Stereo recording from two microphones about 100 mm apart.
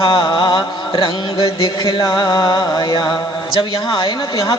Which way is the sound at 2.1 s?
55° left (ahead or behind).